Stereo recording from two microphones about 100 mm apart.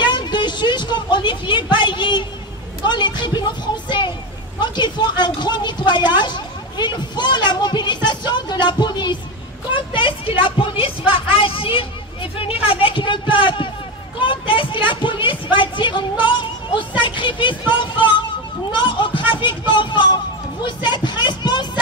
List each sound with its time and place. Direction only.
0.0 s a woman's voice: 50° left (ahead or behind)